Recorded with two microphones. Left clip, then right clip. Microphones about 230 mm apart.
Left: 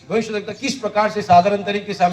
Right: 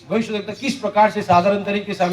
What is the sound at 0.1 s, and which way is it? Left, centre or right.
A man's voice, left.